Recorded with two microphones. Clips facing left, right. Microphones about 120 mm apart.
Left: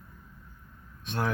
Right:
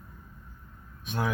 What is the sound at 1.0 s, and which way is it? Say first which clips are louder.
Speech: even; 10° right (ahead or behind).